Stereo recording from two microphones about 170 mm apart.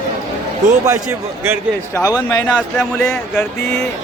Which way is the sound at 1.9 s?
20° left (ahead or behind).